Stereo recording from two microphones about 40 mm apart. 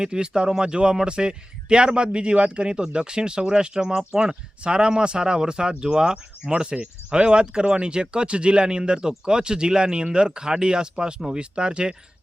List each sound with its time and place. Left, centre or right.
0.0 s a man's voice: centre